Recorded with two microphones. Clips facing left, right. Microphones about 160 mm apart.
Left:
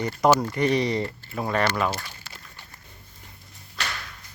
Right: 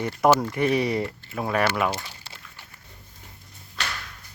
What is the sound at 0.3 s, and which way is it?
Speech, 5° right (ahead or behind).